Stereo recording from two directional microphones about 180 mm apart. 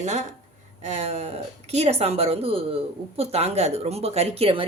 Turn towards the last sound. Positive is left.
turn(degrees=-30)  # may be behind; listen again after turning